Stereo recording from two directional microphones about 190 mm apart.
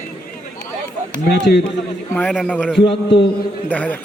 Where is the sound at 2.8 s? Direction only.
25° left (ahead or behind).